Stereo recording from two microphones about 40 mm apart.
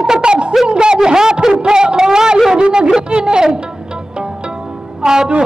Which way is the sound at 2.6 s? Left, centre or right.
Right.